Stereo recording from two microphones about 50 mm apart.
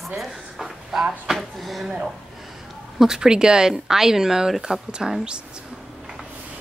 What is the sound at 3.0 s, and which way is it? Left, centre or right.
Speech, centre.